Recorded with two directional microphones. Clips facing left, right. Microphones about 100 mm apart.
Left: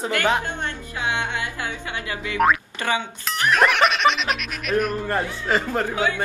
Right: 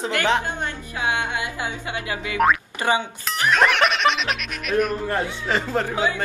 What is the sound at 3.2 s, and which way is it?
Speech, centre (ahead or behind).